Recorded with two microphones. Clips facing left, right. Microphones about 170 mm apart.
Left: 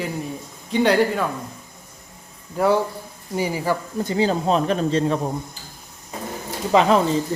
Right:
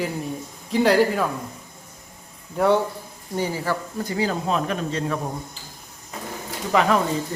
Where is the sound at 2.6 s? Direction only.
Centre (ahead or behind).